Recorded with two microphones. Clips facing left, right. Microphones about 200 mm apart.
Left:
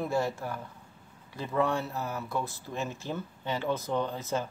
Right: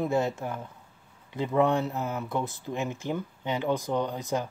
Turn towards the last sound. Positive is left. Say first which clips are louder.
# right 2 dB
turn(degrees=-15)  # may be behind; listen again after turning